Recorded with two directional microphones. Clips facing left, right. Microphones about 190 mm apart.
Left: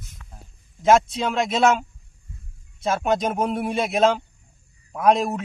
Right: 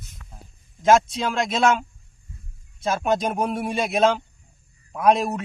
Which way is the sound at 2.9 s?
Centre (ahead or behind).